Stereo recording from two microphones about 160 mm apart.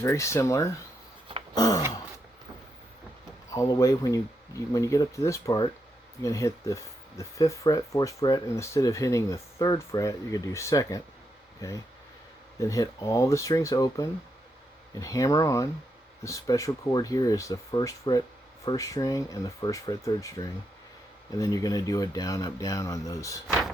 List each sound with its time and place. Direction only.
0.0 s speech: 15° left (ahead or behind)
3.5 s speech: 20° left (ahead or behind)
12.5 s speech: 20° left (ahead or behind)